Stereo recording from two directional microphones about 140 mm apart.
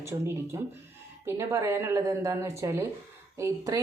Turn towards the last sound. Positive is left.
turn(degrees=-20)  # may be behind; listen again after turning